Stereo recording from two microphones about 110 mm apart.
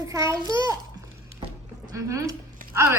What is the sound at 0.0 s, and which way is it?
Speech, 30° right (ahead or behind).